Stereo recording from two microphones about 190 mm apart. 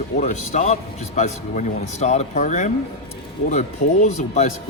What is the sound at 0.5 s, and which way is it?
A man's voice, 40° left (ahead or behind).